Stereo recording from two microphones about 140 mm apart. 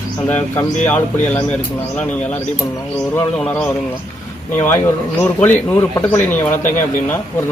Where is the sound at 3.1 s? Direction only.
10° left (ahead or behind).